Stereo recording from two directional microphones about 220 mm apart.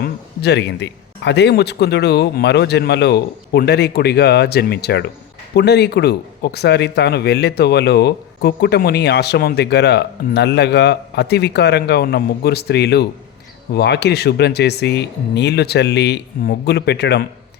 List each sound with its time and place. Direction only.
0.0 s speech: 50° left (ahead or behind)